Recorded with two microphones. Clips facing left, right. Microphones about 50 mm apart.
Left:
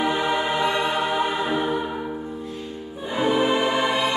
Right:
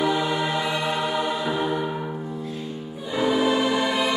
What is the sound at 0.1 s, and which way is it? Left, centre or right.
Music, left.